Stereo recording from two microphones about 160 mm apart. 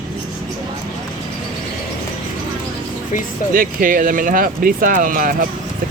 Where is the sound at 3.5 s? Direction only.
60° right (ahead or behind).